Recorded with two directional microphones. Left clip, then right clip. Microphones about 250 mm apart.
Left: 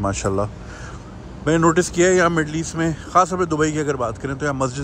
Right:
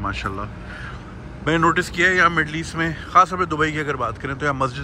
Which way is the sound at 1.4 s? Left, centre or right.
Centre.